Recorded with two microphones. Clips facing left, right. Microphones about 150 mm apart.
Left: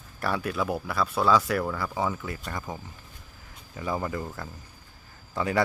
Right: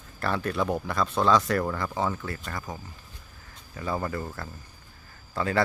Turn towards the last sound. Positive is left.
turn(degrees=15)  # may be behind; listen again after turning